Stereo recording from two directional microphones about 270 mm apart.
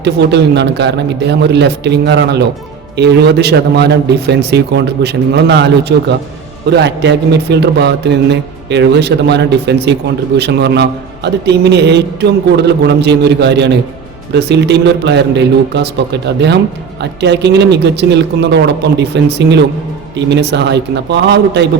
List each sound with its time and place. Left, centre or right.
0.0 s a man's voice: right